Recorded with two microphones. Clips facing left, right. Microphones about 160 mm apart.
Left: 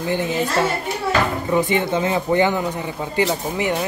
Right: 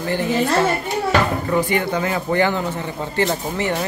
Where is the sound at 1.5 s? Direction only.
20° left (ahead or behind).